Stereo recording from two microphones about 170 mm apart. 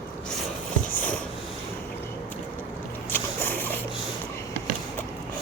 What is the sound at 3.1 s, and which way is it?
Boat, 10° left (ahead or behind).